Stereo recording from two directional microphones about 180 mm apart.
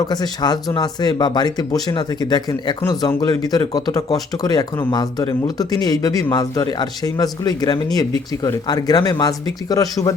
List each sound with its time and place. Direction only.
0.0 s speech: 20° left (ahead or behind)